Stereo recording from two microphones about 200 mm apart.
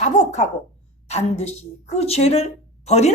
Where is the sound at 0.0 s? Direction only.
35° left (ahead or behind).